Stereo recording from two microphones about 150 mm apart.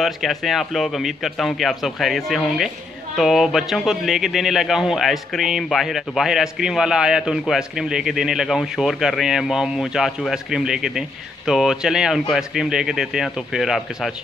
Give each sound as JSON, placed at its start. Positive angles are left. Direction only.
{"t": 0.0, "sound": "a man's voice", "side_deg": 0}